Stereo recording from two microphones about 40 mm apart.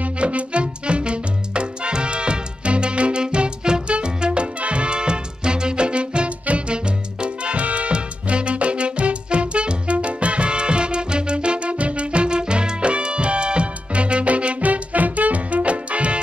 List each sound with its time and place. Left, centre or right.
0.0 s music: right